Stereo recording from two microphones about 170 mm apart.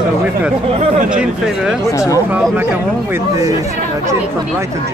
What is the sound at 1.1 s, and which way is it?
Speech, 5° right (ahead or behind).